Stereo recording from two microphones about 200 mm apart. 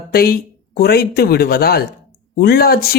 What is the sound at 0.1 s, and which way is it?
Speech, 50° left (ahead or behind).